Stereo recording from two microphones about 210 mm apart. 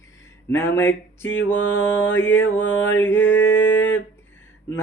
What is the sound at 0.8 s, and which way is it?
Mantra, 10° left (ahead or behind).